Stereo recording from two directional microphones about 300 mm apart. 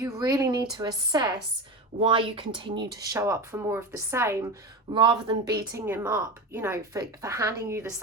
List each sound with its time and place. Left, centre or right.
0.0 s a woman's voice: centre